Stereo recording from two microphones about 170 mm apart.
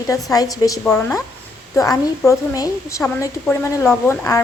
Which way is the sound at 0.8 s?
5° left (ahead or behind).